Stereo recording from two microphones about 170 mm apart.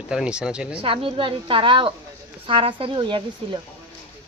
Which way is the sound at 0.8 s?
30° right (ahead or behind).